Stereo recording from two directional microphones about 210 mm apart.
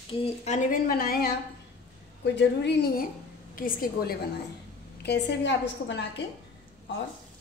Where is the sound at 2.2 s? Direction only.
55° left (ahead or behind).